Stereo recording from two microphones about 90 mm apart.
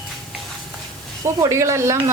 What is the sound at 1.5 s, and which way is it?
Speech, 35° right (ahead or behind).